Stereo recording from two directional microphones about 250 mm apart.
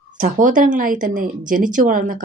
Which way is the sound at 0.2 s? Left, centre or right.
Right.